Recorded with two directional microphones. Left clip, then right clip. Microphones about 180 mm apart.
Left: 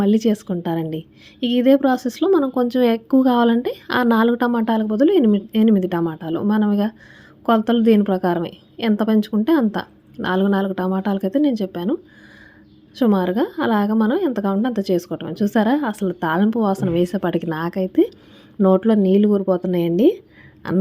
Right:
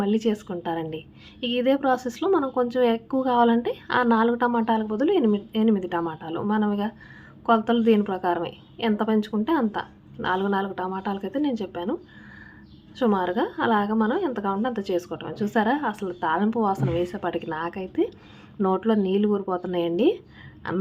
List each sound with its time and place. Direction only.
0.0 s a woman's voice: 40° left (ahead or behind)
13.0 s a woman's voice: 40° left (ahead or behind)